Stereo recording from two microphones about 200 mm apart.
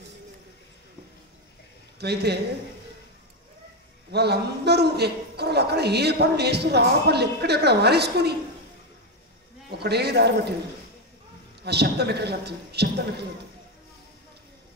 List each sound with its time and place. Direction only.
2.0 s a man's voice: 55° right (ahead or behind)
4.1 s a man's voice: 55° right (ahead or behind)
9.8 s a man's voice: 55° right (ahead or behind)
11.6 s a man's voice: 55° right (ahead or behind)